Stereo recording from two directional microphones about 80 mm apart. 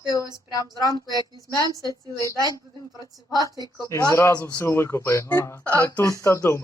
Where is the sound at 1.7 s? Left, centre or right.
Right.